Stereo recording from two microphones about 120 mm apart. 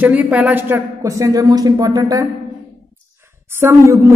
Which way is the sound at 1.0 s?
25° right (ahead or behind).